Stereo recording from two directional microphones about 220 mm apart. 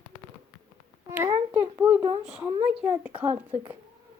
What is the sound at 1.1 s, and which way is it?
Speech, 10° right (ahead or behind).